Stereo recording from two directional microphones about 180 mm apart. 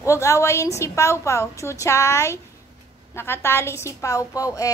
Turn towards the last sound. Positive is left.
turn(degrees=20)  # may be behind; listen again after turning